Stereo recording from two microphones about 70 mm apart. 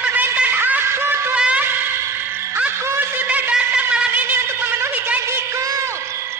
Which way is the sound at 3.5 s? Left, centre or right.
Centre.